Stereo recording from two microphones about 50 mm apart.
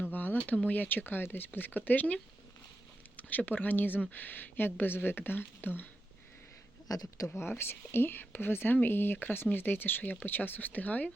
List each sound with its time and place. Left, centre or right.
0.0 s speech: left
3.2 s speech: left
7.3 s speech: left